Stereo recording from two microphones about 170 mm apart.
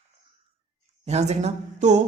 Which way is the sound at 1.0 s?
40° right (ahead or behind).